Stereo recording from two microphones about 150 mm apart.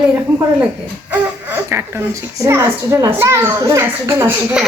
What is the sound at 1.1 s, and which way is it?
Speech, 10° right (ahead or behind).